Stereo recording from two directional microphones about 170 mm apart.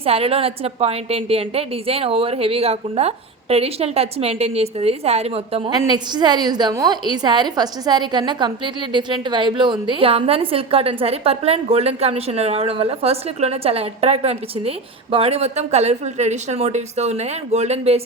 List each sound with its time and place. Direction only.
0.0 s a woman's voice: 35° right (ahead or behind)